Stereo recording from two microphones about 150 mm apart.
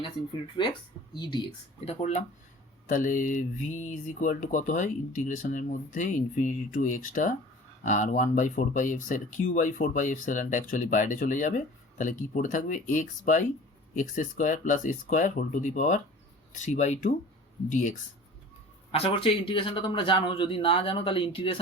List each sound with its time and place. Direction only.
0.6 s speech: 30° left (ahead or behind); by 2.2 s 50° left (ahead or behind)
2.8 s speech: 65° left (ahead or behind)
18.9 s speech: 40° left (ahead or behind)